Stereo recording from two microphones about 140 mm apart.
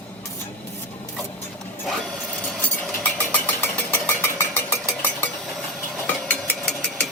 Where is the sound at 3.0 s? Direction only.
15° left (ahead or behind).